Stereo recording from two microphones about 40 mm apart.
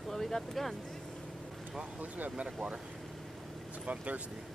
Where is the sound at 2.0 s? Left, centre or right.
Right.